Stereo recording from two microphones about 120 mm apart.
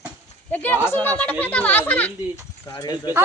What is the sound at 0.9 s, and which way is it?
Speech, 15° left (ahead or behind).